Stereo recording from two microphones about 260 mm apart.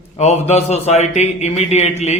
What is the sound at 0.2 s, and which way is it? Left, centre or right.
A man's voice, left.